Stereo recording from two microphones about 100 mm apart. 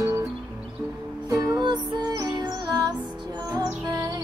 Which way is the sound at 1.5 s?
45° right (ahead or behind).